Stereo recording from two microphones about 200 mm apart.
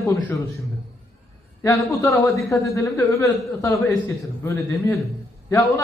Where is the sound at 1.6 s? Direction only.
15° left (ahead or behind).